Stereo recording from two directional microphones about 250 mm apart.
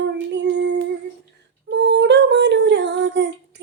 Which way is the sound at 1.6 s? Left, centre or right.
Right.